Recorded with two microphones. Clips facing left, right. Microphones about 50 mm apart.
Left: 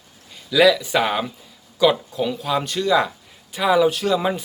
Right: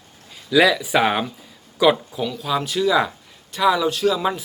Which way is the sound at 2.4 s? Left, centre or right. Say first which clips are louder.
Right 1 dB; centre.